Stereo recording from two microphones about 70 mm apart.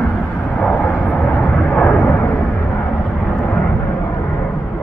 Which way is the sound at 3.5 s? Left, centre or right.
Left.